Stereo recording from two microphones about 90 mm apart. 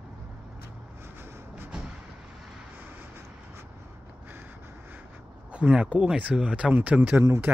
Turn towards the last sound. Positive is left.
turn(degrees=-20)  # may be behind; listen again after turning